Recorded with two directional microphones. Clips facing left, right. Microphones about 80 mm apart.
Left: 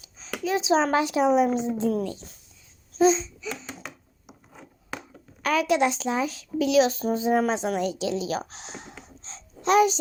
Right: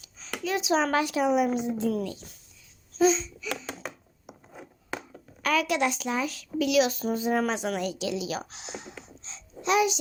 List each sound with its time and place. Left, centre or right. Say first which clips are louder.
0.0 s a woman's voice: left 3 dB; left
5.4 s a woman's voice: left 3 dB; left